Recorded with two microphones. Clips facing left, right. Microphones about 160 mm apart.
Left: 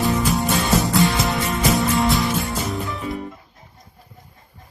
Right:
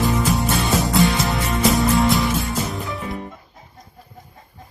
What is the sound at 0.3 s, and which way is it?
Music, centre (ahead or behind).